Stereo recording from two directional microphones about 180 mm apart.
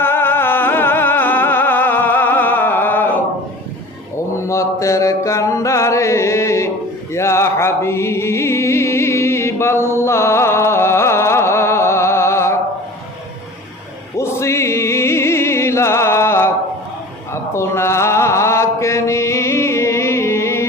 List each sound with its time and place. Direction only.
0.0 s music: 10° left (ahead or behind)
4.4 s mantra: 15° left (ahead or behind)
7.1 s music: 15° left (ahead or behind)
14.2 s music: 15° left (ahead or behind)
17.3 s mantra: 15° left (ahead or behind)